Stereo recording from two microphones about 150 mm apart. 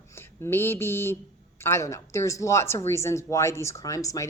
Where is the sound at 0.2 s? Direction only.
15° left (ahead or behind).